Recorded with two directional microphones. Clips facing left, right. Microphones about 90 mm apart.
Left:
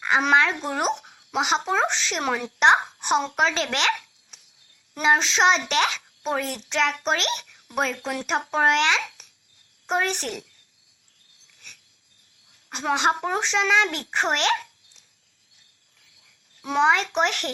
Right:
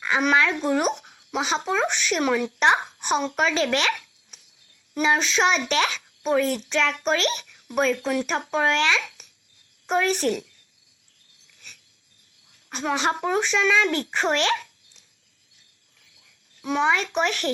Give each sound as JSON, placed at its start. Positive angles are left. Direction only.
{"t": 0.0, "sound": "a child's voice", "side_deg": 30}
{"t": 12.7, "sound": "a child's voice", "side_deg": 25}
{"t": 16.6, "sound": "a child's voice", "side_deg": 30}